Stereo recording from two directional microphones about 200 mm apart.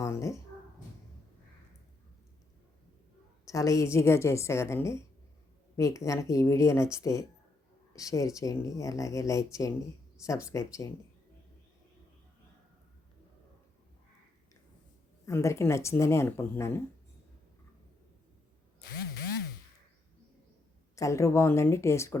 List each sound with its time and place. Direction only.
0.0 s speech: 15° left (ahead or behind)
3.4 s speech: 15° left (ahead or behind)
15.3 s speech: 15° left (ahead or behind)
18.8 s a sound: 50° left (ahead or behind)
20.9 s speech: 15° left (ahead or behind)